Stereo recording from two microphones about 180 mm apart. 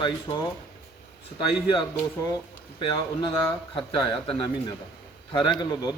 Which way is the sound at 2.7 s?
25° left (ahead or behind).